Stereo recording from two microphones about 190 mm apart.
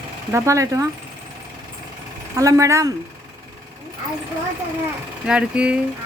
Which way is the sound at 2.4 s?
15° right (ahead or behind).